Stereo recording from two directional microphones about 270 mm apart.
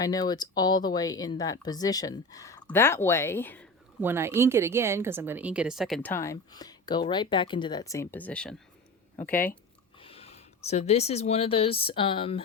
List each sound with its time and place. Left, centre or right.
0.0 s speech: centre
4.0 s a woman's voice: centre
10.0 s speech: left